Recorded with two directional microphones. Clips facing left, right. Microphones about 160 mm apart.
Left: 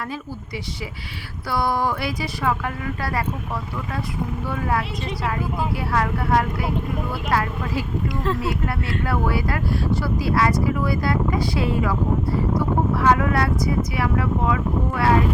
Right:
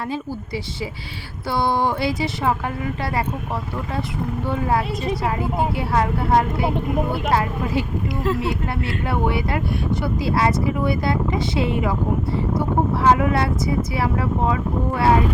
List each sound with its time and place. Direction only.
1.5 s speech: 25° right (ahead or behind)
4.4 s speech: 25° right (ahead or behind)